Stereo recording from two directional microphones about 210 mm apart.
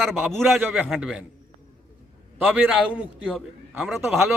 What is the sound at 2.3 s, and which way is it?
A man's voice, 5° right (ahead or behind).